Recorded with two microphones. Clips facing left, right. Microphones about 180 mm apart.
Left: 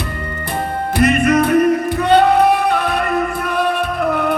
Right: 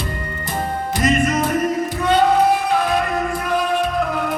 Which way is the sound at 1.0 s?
60° left (ahead or behind).